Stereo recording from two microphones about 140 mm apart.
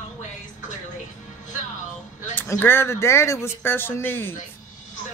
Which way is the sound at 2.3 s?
15° left (ahead or behind).